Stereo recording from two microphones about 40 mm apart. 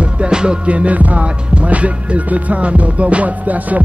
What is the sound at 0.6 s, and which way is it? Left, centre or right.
Music, right.